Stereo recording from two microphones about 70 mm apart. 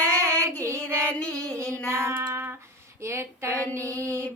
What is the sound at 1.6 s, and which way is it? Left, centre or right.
Female singing, right.